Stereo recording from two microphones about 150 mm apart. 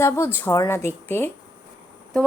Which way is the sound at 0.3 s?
15° left (ahead or behind).